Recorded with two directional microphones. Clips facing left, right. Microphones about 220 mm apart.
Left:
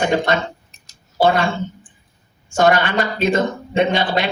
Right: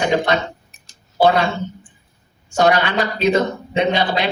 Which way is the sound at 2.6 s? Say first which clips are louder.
Even; 50° left (ahead or behind).